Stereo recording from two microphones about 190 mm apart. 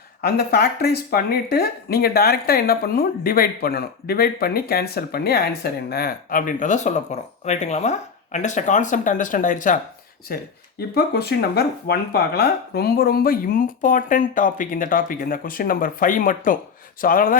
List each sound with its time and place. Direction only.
0.2 s speech: 55° left (ahead or behind)
10.2 s speech: 55° left (ahead or behind)